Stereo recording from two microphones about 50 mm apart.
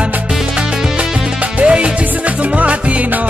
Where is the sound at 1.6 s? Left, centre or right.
Right.